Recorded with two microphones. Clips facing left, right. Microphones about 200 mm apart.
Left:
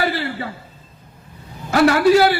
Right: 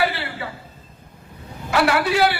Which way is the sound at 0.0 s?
40° left (ahead or behind).